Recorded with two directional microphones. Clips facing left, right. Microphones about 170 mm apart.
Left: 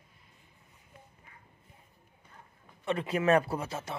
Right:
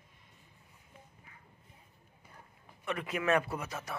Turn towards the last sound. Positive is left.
turn(degrees=30)  # may be behind; listen again after turning